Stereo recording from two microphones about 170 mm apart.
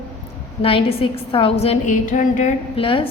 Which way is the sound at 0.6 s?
35° left (ahead or behind).